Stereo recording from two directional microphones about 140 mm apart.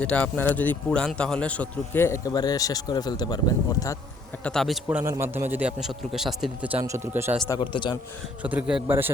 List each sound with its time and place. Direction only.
0.0 s a man's voice: 10° left (ahead or behind); by 3.9 s 25° left (ahead or behind)
4.4 s a man's voice: centre (ahead or behind)
4.9 s a man's voice: 15° right (ahead or behind)
6.8 s a man's voice: 20° right (ahead or behind)
7.5 s a man's voice: 35° left (ahead or behind)
8.4 s a man's voice: 10° right (ahead or behind)